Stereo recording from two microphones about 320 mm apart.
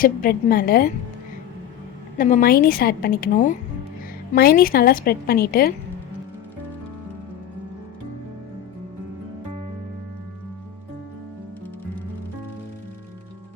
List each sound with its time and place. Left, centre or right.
0.0 s a woman's voice: left
2.1 s a woman's voice: left